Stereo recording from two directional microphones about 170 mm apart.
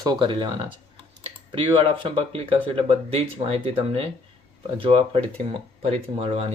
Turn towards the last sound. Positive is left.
turn(degrees=-35)  # may be behind; listen again after turning